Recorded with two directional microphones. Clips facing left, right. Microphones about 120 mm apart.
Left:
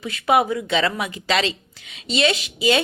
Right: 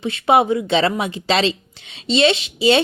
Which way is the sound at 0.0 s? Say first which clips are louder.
Right 3 dB; 25° right (ahead or behind).